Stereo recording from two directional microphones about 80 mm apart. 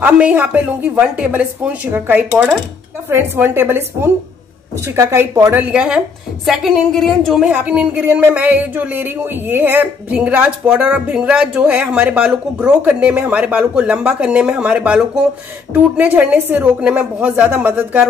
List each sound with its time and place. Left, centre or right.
0.0 s a woman's voice: centre
5.6 s a woman's voice: centre
7.5 s speech: centre